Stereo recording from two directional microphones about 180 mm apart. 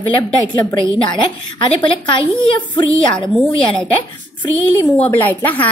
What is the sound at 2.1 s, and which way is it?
A child's voice, 25° left (ahead or behind).